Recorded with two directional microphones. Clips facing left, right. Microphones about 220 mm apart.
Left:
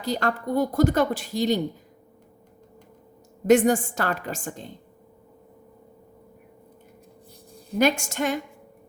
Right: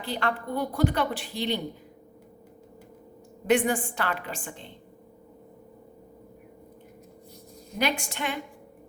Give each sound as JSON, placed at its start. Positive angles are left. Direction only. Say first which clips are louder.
{"t": 0.0, "sound": "speech", "louder": "left 4 dB", "side_deg": 40}
{"t": 3.4, "sound": "speech", "louder": "left 6 dB", "side_deg": 45}
{"t": 7.8, "sound": "speech", "louder": "left 7 dB", "side_deg": 45}